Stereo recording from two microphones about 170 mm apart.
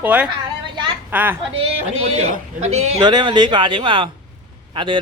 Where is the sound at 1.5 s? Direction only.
35° right (ahead or behind).